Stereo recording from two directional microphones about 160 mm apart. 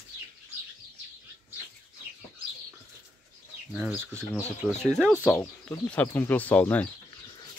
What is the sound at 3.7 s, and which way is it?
Speech, 10° right (ahead or behind).